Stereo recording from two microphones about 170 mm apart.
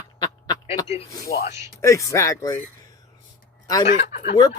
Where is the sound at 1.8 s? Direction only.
20° left (ahead or behind).